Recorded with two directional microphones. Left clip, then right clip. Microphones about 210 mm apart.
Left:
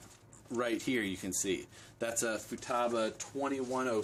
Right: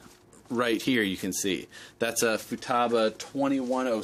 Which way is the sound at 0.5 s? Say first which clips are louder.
Right 8 dB; 40° right (ahead or behind).